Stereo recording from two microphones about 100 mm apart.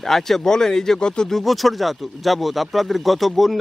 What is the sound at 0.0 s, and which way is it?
Speech, 5° left (ahead or behind).